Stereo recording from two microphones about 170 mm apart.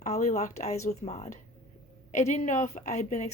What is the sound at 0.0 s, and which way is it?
Speech, 45° left (ahead or behind).